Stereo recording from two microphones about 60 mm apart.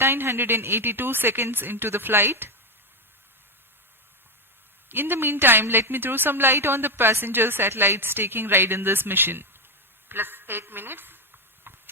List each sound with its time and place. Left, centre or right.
0.0 s a woman's voice: right
4.9 s a woman's voice: right
11.7 s a sound: right